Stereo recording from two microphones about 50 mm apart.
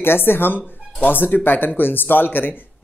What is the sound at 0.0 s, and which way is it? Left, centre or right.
Speech, left.